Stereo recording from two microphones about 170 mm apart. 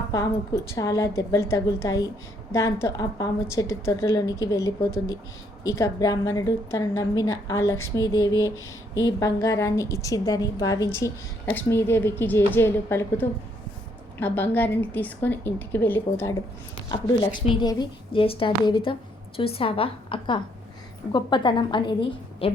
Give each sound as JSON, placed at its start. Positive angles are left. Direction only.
{"t": 0.1, "sound": "a woman's voice", "side_deg": 20}
{"t": 16.9, "sound": "a woman's voice", "side_deg": 25}